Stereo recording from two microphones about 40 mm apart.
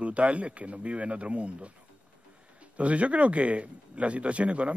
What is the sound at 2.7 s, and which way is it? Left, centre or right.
Speech, right.